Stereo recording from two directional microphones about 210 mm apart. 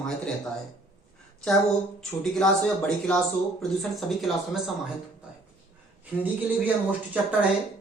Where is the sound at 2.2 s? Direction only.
5° left (ahead or behind).